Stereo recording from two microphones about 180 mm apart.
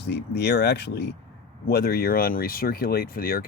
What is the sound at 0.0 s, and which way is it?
Speech, 70° left (ahead or behind).